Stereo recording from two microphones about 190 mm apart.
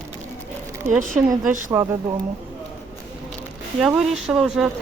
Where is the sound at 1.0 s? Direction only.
45° right (ahead or behind).